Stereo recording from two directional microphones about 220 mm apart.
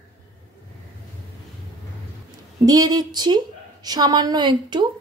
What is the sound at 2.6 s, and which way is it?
A woman's voice, 15° right (ahead or behind).